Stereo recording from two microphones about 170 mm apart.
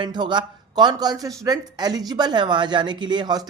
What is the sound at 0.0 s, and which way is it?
Speech, 25° right (ahead or behind).